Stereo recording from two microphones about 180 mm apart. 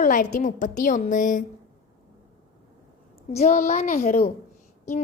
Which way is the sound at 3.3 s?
35° left (ahead or behind).